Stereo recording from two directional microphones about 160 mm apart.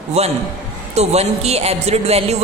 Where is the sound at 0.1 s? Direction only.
40° right (ahead or behind).